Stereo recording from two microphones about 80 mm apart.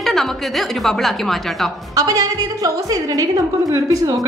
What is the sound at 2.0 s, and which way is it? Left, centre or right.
A woman's voice, right.